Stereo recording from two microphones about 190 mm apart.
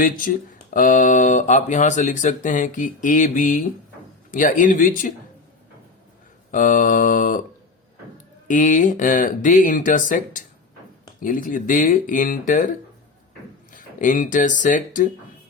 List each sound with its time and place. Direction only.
0.7 s speech: 45° left (ahead or behind)
6.5 s speech: 45° left (ahead or behind)
8.4 s speech: 40° left (ahead or behind)
13.7 s speech: 45° left (ahead or behind)